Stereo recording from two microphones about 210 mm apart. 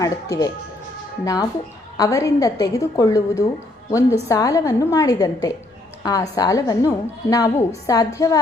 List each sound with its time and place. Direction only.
0.0 s a woman's voice: 15° left (ahead or behind)